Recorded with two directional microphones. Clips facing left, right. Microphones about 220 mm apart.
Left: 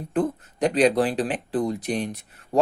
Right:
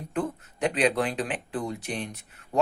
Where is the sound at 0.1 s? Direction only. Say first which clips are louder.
Left 6 dB; 35° left (ahead or behind).